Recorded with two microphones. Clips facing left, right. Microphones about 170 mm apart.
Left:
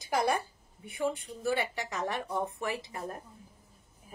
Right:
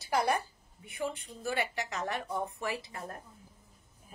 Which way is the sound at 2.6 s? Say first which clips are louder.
Left 2 dB; 20° left (ahead or behind).